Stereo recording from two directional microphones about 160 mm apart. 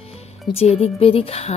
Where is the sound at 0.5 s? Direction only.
40° left (ahead or behind).